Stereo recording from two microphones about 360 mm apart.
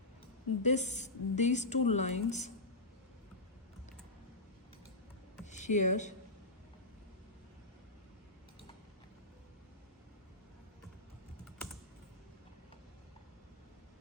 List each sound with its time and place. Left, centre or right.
0.6 s a woman's voice: centre
5.5 s speech: centre